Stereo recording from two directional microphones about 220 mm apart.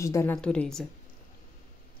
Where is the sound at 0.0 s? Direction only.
10° left (ahead or behind).